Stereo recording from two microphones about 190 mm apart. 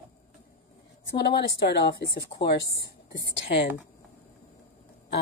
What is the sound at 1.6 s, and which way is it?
Speech, 60° left (ahead or behind).